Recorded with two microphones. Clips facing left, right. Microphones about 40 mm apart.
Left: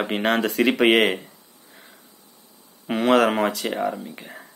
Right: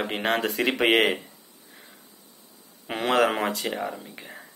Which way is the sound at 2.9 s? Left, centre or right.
Left.